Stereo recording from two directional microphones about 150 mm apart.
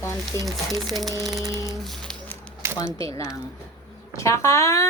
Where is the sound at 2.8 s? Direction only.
20° left (ahead or behind).